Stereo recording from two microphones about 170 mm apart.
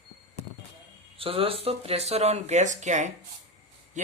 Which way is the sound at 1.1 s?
35° right (ahead or behind).